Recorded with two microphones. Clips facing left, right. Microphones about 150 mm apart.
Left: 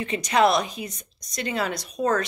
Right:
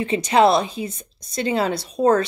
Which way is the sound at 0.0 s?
30° right (ahead or behind).